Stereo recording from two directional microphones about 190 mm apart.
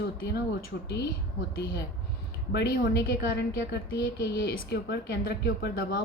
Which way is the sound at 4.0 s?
55° left (ahead or behind).